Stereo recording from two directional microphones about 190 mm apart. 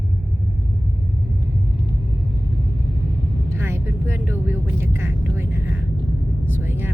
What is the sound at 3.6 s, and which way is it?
Vehicle, 15° right (ahead or behind).